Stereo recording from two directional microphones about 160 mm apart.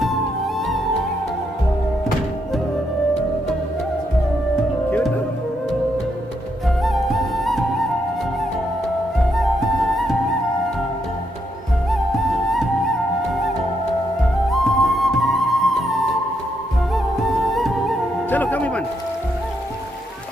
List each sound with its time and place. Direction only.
4.9 s music: 10° left (ahead or behind)
6.8 s flute: centre (ahead or behind)
11.9 s music: centre (ahead or behind)
14.5 s flute: centre (ahead or behind)
17.5 s music: centre (ahead or behind)